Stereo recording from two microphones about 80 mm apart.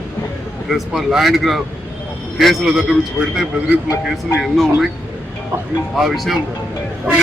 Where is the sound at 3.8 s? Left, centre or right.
Left.